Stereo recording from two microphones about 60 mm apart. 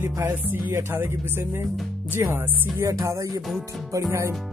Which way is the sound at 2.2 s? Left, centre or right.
Right.